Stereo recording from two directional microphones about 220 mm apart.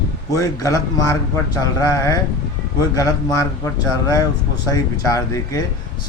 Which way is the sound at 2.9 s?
15° left (ahead or behind).